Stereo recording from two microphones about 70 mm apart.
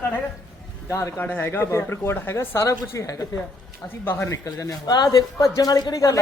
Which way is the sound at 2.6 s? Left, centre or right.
Left.